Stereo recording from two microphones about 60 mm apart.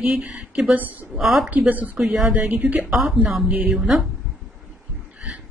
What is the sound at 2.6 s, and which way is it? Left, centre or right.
Speech, right.